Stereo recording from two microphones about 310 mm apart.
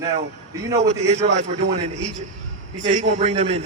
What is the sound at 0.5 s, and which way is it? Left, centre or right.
Speech, centre.